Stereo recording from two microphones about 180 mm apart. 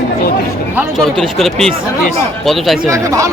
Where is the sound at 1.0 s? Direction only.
Centre (ahead or behind).